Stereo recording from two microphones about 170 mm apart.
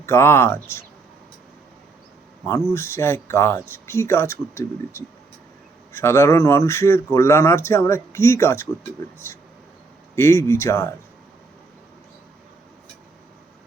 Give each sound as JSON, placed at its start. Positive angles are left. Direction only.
{"t": 0.0, "sound": "speech", "side_deg": 15}
{"t": 2.4, "sound": "speech", "side_deg": 15}